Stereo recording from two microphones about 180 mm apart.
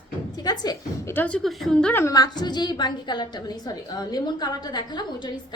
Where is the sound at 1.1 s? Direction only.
5° left (ahead or behind).